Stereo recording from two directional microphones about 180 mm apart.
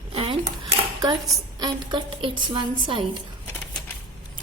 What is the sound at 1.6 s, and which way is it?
A woman's voice, 25° right (ahead or behind).